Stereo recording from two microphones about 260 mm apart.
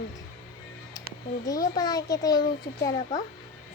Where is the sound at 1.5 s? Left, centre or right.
Centre.